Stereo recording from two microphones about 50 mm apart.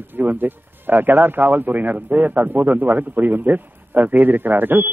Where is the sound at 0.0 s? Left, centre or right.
Right.